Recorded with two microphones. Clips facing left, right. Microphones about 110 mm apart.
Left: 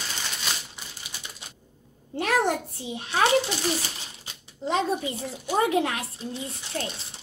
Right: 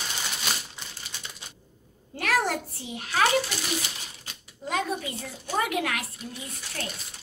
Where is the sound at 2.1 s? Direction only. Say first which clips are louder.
Left 3 dB; 20° left (ahead or behind).